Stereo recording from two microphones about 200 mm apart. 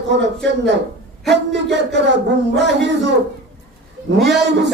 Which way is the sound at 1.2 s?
60° right (ahead or behind).